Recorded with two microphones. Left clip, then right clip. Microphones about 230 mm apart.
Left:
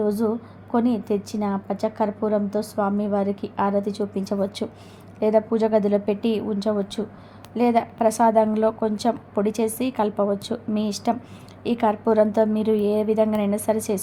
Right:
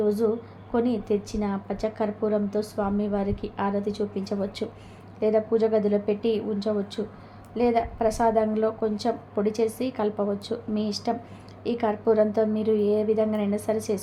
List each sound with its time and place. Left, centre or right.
0.0 s a woman's voice: left